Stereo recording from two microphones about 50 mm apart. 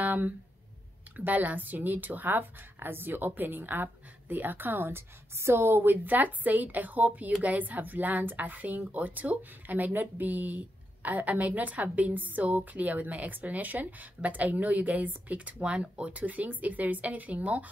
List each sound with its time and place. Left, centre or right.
0.0 s a sound: right
1.1 s speech: right
5.7 s speech: right
15.6 s speech: right